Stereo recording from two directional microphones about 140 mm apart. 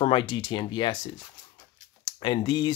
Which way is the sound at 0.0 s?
35° left (ahead or behind).